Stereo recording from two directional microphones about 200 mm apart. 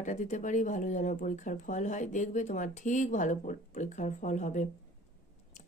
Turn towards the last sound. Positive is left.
turn(degrees=35)  # may be behind; listen again after turning